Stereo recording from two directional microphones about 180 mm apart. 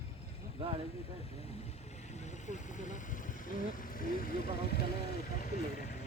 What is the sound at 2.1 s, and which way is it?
Vehicle, 40° left (ahead or behind).